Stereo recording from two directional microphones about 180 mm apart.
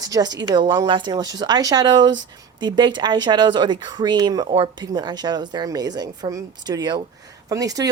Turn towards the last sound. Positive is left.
turn(degrees=-20)  # may be behind; listen again after turning